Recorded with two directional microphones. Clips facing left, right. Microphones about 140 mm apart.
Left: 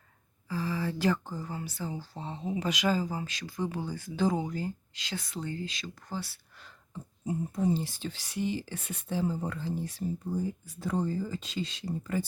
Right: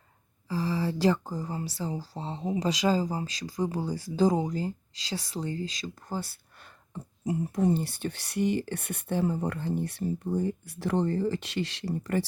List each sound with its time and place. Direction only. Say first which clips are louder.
0.4 s speech: right 3 dB; 35° right (ahead or behind); by 7.0 s 55° right (ahead or behind)
7.3 s speech: right 3 dB; 80° right